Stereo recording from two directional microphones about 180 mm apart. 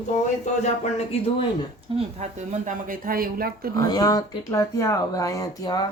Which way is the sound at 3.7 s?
20° left (ahead or behind).